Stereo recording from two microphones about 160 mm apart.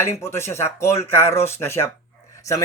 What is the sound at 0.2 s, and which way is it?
Speech, 15° left (ahead or behind).